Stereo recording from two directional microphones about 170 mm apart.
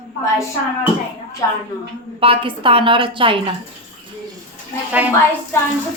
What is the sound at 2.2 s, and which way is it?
A woman's voice, 30° right (ahead or behind).